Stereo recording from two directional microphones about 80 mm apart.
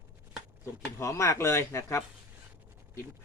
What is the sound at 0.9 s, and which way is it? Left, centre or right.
Speech, left.